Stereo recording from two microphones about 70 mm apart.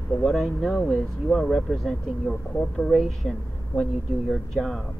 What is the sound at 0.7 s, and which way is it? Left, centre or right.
Speech, centre.